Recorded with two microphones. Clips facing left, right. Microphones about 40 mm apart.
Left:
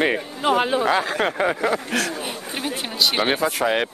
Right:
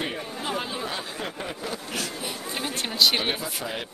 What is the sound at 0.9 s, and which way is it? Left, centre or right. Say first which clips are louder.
Speech: left 12 dB; left.